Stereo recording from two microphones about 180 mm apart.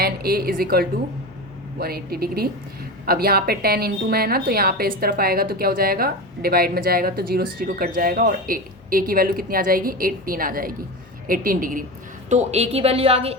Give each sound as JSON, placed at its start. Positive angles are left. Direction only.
{"t": 0.0, "sound": "a woman's voice", "side_deg": -60}
{"t": 12.3, "sound": "a woman's voice", "side_deg": -40}